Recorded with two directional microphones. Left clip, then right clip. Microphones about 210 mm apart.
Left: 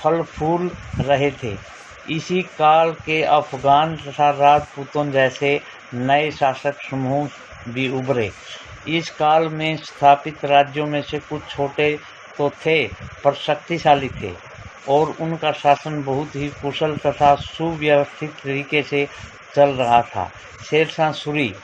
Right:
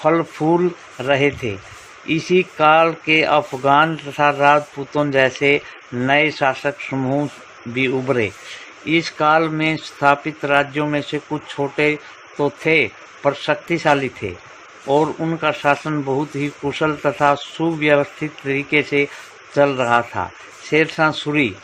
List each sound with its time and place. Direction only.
0.0 s speech: 40° right (ahead or behind)